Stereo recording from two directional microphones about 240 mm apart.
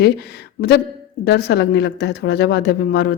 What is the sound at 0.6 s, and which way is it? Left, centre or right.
A woman's voice, left.